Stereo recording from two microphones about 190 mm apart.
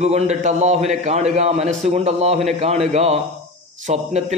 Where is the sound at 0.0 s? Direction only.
35° right (ahead or behind).